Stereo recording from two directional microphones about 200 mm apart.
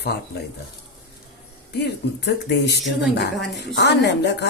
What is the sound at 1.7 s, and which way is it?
Speech, 55° left (ahead or behind).